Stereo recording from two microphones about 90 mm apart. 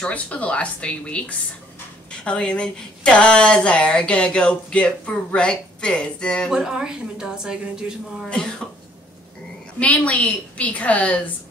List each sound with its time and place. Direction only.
0.0 s speech: 15° left (ahead or behind)
6.5 s a woman's voice: 5° right (ahead or behind)
8.3 s speech: 10° left (ahead or behind)
9.8 s speech: 15° left (ahead or behind)